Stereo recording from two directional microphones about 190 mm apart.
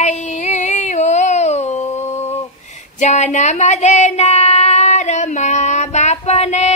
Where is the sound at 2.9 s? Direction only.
40° left (ahead or behind).